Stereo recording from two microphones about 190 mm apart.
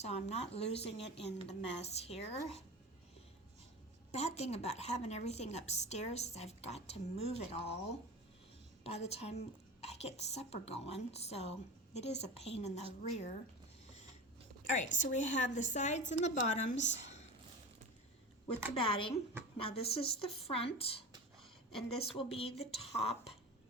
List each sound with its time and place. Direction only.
0.0 s a woman's voice: 35° left (ahead or behind)
1.2 s a woman's voice: 65° left (ahead or behind)
1.8 s a woman's voice: 35° left (ahead or behind)
4.1 s a woman's voice: 35° left (ahead or behind)
14.8 s a woman's voice: 40° left (ahead or behind)
18.7 s a woman's voice: 30° left (ahead or behind)